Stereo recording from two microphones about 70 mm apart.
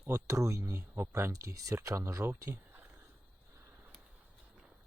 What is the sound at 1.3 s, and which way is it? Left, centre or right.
Speech, right.